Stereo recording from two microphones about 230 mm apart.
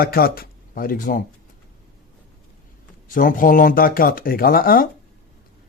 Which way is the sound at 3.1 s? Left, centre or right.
Left.